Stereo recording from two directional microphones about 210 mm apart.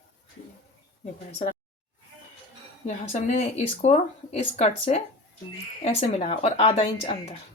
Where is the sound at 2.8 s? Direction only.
35° left (ahead or behind).